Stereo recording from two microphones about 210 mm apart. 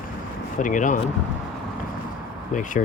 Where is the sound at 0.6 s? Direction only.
35° left (ahead or behind).